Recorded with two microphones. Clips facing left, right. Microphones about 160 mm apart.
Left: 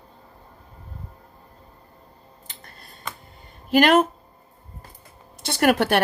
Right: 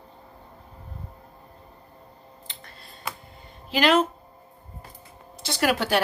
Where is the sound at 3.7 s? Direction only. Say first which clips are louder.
Left 4 dB; 55° left (ahead or behind).